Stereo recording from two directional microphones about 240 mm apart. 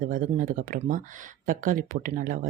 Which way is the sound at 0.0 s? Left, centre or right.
Right.